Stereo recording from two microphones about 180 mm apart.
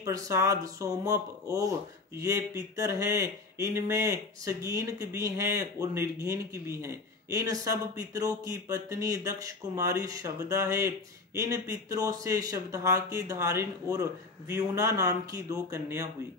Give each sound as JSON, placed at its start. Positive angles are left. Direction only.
{"t": 0.0, "sound": "speech", "side_deg": -15}